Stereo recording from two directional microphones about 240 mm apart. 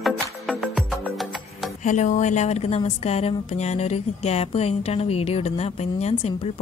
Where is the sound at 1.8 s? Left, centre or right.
Left.